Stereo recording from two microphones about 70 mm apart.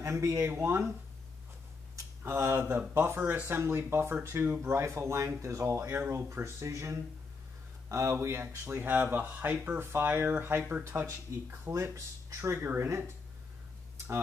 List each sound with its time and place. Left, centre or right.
0.0 s speech: right
2.2 s speech: right
10.8 s speech: right
11.9 s speech: right